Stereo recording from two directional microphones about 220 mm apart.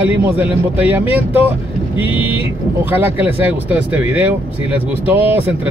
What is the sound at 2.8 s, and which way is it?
Speech, 10° right (ahead or behind).